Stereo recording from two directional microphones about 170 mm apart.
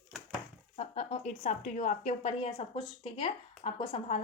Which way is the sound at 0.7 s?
40° left (ahead or behind).